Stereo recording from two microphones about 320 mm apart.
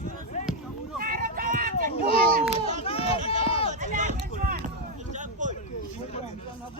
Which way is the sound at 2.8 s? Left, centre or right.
Centre.